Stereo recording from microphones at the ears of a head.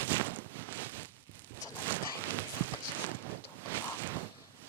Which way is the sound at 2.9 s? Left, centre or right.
Right.